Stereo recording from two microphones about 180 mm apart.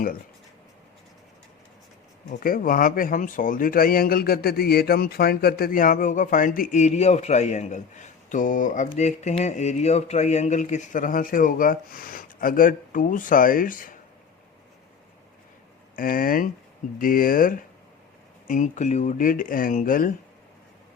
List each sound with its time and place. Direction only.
2.4 s speech: 50° left (ahead or behind)
16.0 s speech: 50° left (ahead or behind)